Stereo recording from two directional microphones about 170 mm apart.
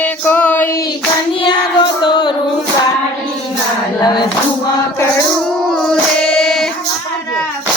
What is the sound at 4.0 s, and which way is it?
Child singing, 25° left (ahead or behind).